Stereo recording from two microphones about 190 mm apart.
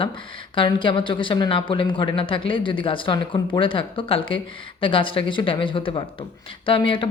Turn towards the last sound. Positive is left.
turn(degrees=25)  # may be behind; listen again after turning